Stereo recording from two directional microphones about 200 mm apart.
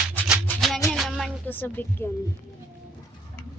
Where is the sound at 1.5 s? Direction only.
10° left (ahead or behind).